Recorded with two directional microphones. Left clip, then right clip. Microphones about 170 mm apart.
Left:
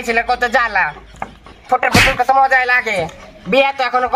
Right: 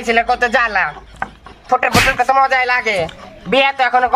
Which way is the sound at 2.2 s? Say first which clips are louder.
Left 1 dB; 20° right (ahead or behind).